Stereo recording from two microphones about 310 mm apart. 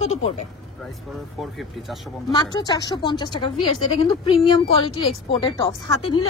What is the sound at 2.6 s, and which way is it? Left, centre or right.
A woman's voice, centre.